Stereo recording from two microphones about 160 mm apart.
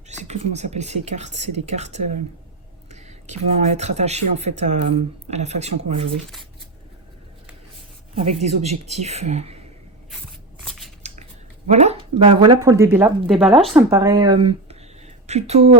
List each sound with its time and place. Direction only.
0.1 s speech: 45° right (ahead or behind)
8.1 s speech: 40° right (ahead or behind)
10.7 s scissors: centre (ahead or behind)
11.7 s speech: 40° right (ahead or behind)
12.6 s speech: 20° right (ahead or behind)
13.3 s speech: centre (ahead or behind)
13.7 s speech: 20° right (ahead or behind); by 15.7 s 40° right (ahead or behind)